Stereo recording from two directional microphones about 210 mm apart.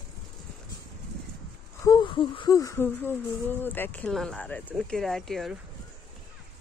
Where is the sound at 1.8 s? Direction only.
20° left (ahead or behind); by 5.6 s centre (ahead or behind).